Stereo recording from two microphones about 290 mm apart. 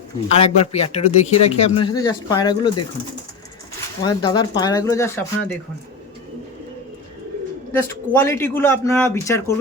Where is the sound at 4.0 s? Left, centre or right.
Centre.